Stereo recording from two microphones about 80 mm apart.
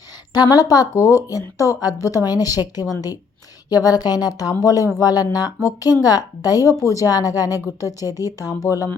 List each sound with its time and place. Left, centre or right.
0.3 s a woman's voice: left